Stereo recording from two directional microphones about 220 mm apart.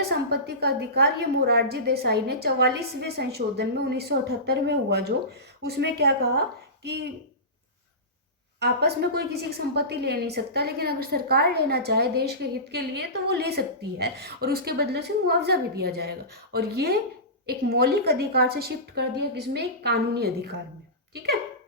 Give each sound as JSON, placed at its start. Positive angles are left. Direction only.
{"t": 0.1, "sound": "a woman's voice", "side_deg": -45}
{"t": 8.5, "sound": "a woman's voice", "side_deg": -50}